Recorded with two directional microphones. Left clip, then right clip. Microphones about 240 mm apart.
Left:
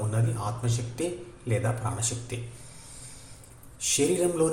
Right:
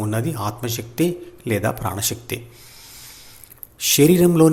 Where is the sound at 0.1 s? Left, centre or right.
Right.